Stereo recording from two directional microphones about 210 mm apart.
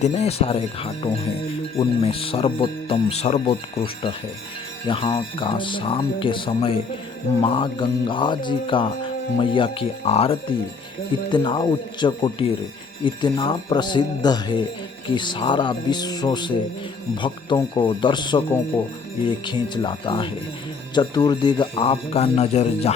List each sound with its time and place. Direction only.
0.0 s speech: 30° left (ahead or behind)